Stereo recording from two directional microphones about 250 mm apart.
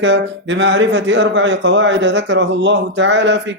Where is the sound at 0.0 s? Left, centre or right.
Right.